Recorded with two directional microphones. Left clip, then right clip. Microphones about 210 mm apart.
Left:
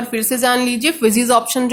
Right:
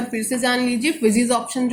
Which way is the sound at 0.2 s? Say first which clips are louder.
Left 5 dB; 45° left (ahead or behind).